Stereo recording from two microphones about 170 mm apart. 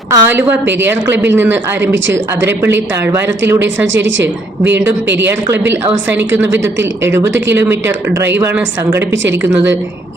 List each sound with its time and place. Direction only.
0.1 s a woman's voice: 15° right (ahead or behind)